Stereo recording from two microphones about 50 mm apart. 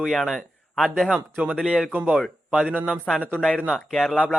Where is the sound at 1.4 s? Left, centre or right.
Right.